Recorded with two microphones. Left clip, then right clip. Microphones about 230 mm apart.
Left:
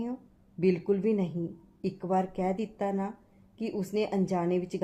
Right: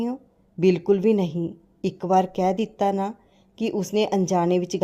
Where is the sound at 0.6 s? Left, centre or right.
Right.